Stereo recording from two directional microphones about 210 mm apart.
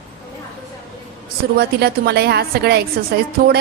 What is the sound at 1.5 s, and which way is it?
A woman's voice, 50° right (ahead or behind).